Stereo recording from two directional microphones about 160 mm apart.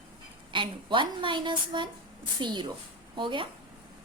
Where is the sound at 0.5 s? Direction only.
30° right (ahead or behind).